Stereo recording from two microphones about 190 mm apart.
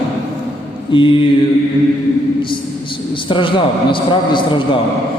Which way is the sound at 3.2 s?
25° left (ahead or behind).